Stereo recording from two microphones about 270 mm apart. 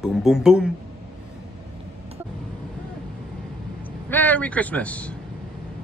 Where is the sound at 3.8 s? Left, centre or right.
Centre.